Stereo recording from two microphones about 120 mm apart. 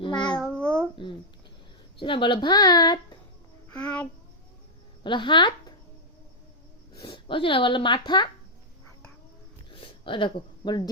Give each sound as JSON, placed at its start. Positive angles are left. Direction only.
{"t": 0.0, "sound": "babbling", "side_deg": 40}
{"t": 0.3, "sound": "babbling", "side_deg": 10}
{"t": 2.0, "sound": "speech", "side_deg": 45}
{"t": 3.7, "sound": "a child's voice", "side_deg": 10}
{"t": 5.0, "sound": "speech", "side_deg": 40}
{"t": 7.0, "sound": "speech", "side_deg": 45}
{"t": 9.7, "sound": "a sound", "side_deg": 45}